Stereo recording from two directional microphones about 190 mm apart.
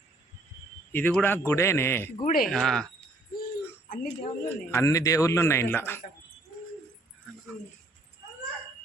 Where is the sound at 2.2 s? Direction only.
50° left (ahead or behind).